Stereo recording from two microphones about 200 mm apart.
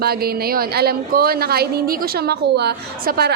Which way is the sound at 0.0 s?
50° right (ahead or behind).